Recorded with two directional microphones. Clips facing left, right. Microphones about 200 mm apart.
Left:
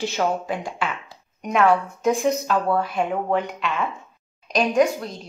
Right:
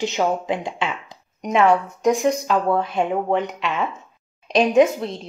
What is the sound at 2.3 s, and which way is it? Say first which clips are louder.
Speech: right 2 dB; 15° right (ahead or behind).